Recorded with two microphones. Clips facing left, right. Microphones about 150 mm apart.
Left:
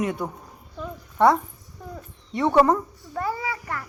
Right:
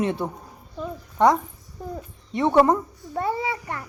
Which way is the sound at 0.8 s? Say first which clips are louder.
Even; 20° right (ahead or behind).